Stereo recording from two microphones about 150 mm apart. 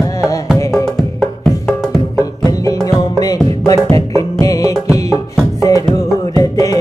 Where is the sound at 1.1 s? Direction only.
5° left (ahead or behind).